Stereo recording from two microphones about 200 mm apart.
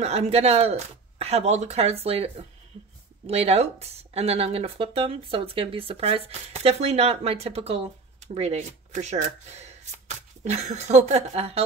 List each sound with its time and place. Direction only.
0.0 s speech: 35° right (ahead or behind)